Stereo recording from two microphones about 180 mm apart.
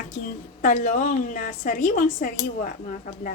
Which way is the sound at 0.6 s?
45° left (ahead or behind).